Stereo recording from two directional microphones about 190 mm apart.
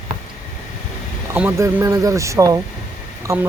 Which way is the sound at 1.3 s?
10° right (ahead or behind).